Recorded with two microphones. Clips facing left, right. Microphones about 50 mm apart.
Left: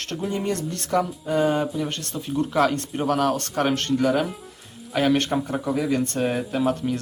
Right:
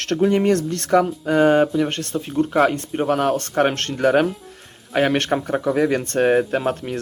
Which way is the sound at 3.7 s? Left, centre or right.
Right.